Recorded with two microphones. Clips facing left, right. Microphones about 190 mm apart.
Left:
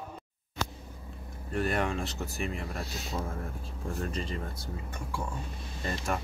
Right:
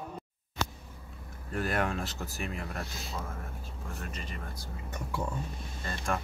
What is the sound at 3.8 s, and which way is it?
Speech, 30° left (ahead or behind).